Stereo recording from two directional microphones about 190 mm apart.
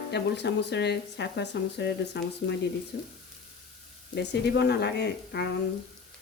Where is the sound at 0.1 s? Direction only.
65° left (ahead or behind).